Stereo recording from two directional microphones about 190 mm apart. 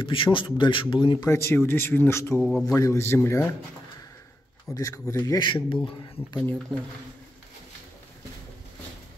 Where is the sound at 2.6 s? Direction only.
15° left (ahead or behind).